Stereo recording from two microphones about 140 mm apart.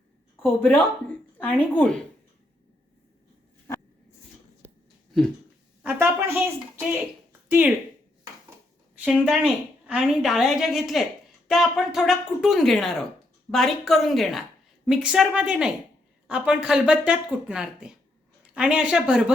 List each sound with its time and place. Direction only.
0.6 s speech: 10° left (ahead or behind)
5.8 s speech: 15° right (ahead or behind)
7.4 s a sound: 15° right (ahead or behind)
9.0 s a woman's voice: 5° right (ahead or behind)